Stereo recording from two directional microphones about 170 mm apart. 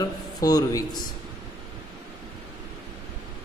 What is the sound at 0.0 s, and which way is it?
A man's voice, 20° left (ahead or behind).